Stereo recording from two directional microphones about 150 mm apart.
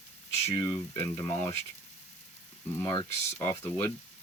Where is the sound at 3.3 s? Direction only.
15° left (ahead or behind).